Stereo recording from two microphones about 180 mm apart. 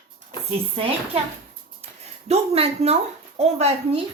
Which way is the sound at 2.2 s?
35° right (ahead or behind).